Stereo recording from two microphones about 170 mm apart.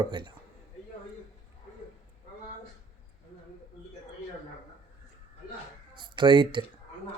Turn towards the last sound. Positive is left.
turn(degrees=-30)  # may be behind; listen again after turning